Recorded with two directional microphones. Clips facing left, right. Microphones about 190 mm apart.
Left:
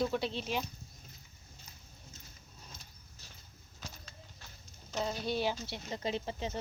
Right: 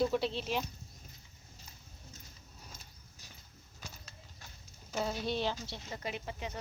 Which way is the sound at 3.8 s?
10° right (ahead or behind).